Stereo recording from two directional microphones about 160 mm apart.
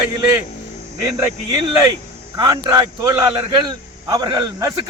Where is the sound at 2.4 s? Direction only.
25° right (ahead or behind).